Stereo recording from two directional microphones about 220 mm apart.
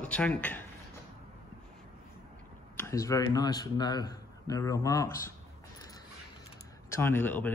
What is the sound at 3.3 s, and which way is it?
A man's voice, 20° left (ahead or behind).